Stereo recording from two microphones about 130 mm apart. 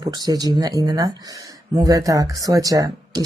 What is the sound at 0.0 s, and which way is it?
Speech, 30° right (ahead or behind).